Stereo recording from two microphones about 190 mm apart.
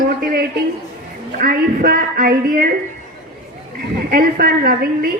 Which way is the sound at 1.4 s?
50° right (ahead or behind).